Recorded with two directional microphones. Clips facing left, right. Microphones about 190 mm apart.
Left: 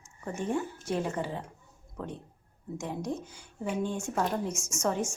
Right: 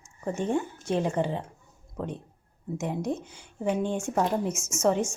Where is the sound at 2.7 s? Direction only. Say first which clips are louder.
Right 4 dB; 20° right (ahead or behind).